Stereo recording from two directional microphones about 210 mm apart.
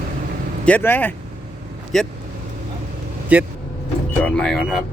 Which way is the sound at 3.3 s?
5° right (ahead or behind).